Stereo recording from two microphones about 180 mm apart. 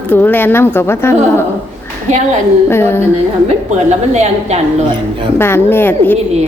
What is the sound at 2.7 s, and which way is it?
Speech, 15° left (ahead or behind).